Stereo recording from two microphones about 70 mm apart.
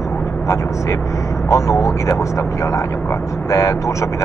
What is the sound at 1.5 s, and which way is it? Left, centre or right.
Speech, left.